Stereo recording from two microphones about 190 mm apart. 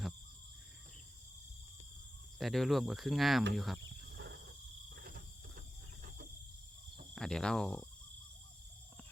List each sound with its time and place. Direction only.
2.4 s cricket: centre (ahead or behind)
4.2 s cricket: 65° right (ahead or behind)
4.9 s cricket: 50° right (ahead or behind)
7.2 s cricket: 5° left (ahead or behind)